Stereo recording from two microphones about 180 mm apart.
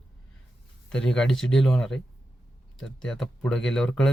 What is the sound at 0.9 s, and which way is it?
Speech, 5° left (ahead or behind).